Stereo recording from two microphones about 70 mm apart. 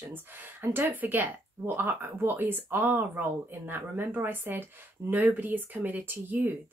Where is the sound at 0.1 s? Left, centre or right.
Right.